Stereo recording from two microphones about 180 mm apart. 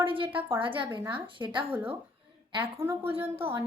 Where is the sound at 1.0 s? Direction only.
10° right (ahead or behind).